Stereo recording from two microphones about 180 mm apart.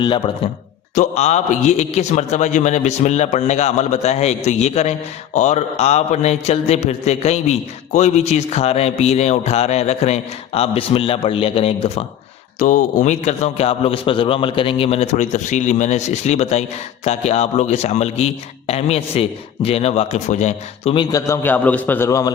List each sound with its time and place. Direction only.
0.0 s speech: 25° left (ahead or behind)
0.9 s a man's voice: 40° left (ahead or behind)
12.5 s a man's voice: 45° left (ahead or behind)
20.9 s a man's voice: 20° left (ahead or behind)